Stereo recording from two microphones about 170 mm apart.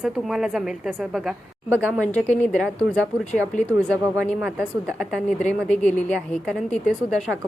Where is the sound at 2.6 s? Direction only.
5° left (ahead or behind).